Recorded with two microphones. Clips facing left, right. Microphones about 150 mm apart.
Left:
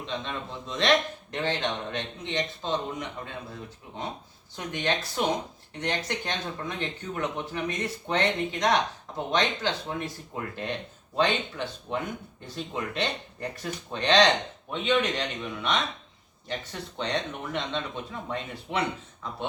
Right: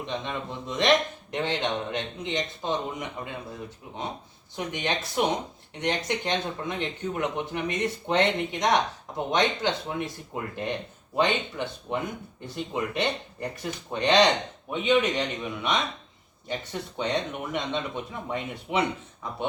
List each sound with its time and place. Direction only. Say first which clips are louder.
0.0 s speech: right 2 dB; 15° right (ahead or behind)
17.0 s speech: right 2 dB; 15° right (ahead or behind)